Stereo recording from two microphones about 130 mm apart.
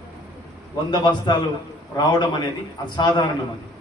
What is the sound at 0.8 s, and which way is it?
A man's voice, 35° left (ahead or behind).